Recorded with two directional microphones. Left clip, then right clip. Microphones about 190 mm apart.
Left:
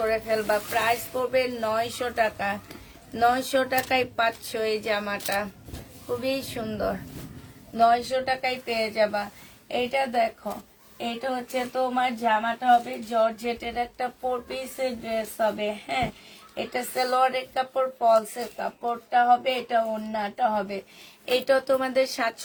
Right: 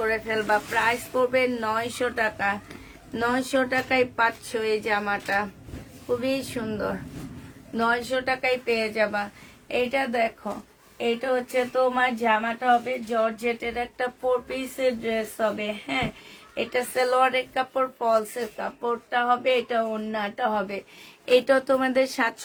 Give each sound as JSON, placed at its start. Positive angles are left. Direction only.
{"t": 0.0, "sound": "speech", "side_deg": -20}
{"t": 7.8, "sound": "speech", "side_deg": -30}